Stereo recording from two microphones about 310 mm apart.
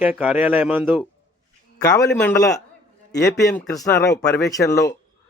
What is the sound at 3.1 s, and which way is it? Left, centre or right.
Speech, left.